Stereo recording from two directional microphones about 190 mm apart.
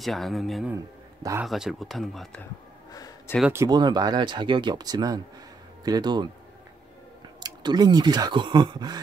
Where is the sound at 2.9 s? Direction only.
20° left (ahead or behind).